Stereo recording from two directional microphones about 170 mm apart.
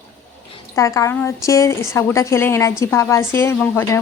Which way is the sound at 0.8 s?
20° left (ahead or behind).